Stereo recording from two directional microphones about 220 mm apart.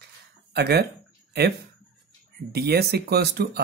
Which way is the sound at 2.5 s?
45° right (ahead or behind).